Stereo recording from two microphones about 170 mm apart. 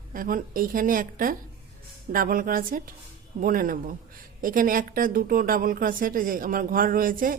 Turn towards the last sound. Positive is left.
turn(degrees=-55)  # may be behind; listen again after turning